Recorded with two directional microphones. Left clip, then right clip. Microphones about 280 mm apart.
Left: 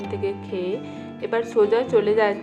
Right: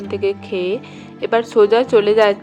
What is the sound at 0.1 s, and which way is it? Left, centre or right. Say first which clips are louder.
A woman's voice: right 9 dB; right.